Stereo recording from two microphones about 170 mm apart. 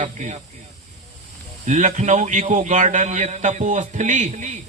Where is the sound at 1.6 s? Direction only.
45° right (ahead or behind).